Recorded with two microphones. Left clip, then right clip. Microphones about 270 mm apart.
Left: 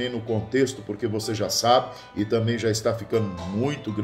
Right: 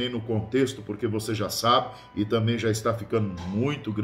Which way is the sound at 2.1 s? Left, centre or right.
Centre.